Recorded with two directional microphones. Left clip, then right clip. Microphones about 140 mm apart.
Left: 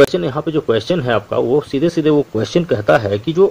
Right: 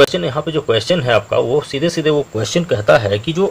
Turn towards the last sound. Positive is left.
turn(degrees=35)  # may be behind; listen again after turning